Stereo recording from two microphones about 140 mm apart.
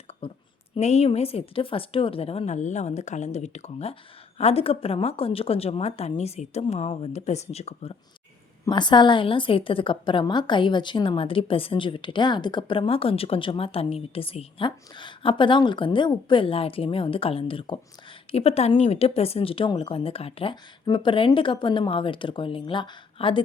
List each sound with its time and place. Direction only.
0.2 s a woman's voice: 40° left (ahead or behind)
0.8 s a woman's voice: 50° left (ahead or behind)
8.6 s a woman's voice: 35° left (ahead or behind)